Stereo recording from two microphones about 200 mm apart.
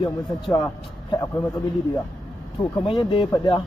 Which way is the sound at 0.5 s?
15° left (ahead or behind).